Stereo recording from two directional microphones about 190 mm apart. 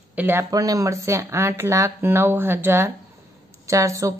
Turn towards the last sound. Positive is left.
turn(degrees=-15)  # may be behind; listen again after turning